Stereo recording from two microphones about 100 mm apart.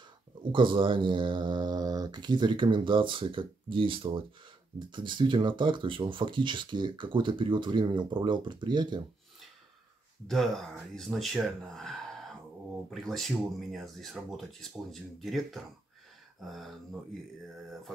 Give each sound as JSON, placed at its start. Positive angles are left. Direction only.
{"t": 0.4, "sound": "speech", "side_deg": -55}
{"t": 10.2, "sound": "speech", "side_deg": 5}
{"t": 16.3, "sound": "a sound", "side_deg": 0}